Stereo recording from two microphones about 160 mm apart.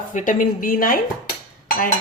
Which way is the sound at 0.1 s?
50° left (ahead or behind).